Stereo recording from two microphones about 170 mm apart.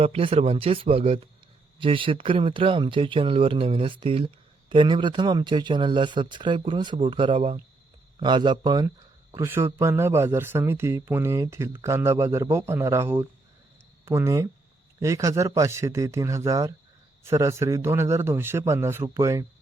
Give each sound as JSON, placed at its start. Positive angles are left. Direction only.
{"t": 0.0, "sound": "speech", "side_deg": -35}